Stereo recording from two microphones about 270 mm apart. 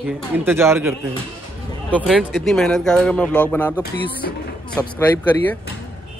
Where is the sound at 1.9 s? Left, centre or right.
Centre.